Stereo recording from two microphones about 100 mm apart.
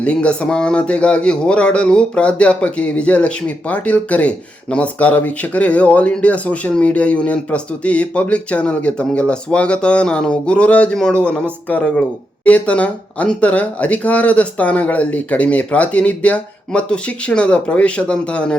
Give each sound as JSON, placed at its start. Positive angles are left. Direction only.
{"t": 0.0, "sound": "a man's voice", "side_deg": 10}